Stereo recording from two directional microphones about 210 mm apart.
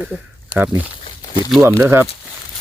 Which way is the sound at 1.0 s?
25° left (ahead or behind).